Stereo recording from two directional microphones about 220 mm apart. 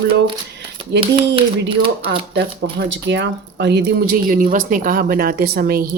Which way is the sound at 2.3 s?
45° right (ahead or behind).